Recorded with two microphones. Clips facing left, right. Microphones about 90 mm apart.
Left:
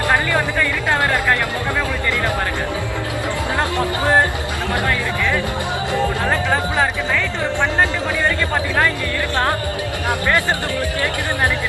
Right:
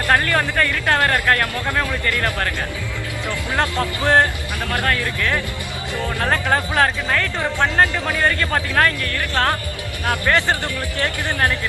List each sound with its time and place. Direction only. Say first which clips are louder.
0.1 s speech: right 2 dB; 20° left (ahead or behind)
3.6 s speech: even; 20° left (ahead or behind)
9.3 s speech: even; 20° left (ahead or behind)